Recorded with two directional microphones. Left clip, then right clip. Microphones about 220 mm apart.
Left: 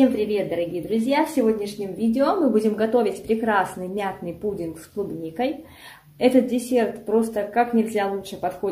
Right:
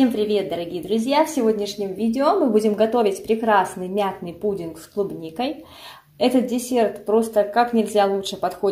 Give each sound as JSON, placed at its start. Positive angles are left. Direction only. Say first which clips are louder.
{"t": 0.0, "sound": "a woman's voice", "louder": "right 1 dB", "side_deg": -25}
{"t": 6.1, "sound": "a woman's voice", "louder": "left 1 dB", "side_deg": -15}